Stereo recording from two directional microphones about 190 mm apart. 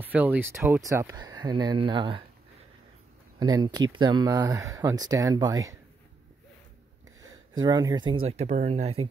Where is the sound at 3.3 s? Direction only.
20° right (ahead or behind).